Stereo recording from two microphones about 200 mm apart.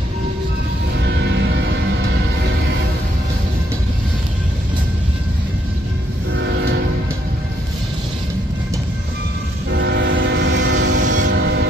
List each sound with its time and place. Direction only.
9.7 s train: 60° right (ahead or behind)
11.1 s train: 45° right (ahead or behind)